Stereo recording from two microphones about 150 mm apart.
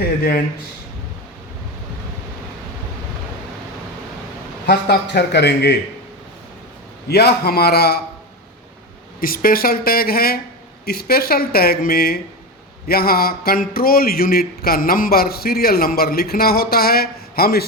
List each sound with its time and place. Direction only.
0.0 s a sound: 90° left
4.6 s speech: 90° left
7.1 s speech: 90° left
9.2 s speech: 75° left (ahead or behind)